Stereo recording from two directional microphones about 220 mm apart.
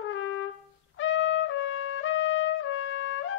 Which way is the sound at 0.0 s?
60° left (ahead or behind).